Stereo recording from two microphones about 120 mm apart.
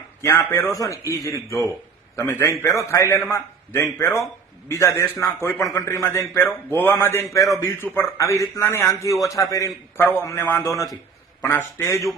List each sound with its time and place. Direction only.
0.2 s a man's voice: 20° left (ahead or behind)